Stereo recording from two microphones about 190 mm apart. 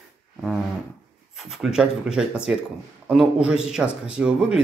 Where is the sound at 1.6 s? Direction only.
5° right (ahead or behind).